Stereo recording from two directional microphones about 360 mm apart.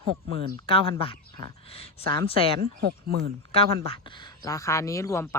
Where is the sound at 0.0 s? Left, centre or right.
Right.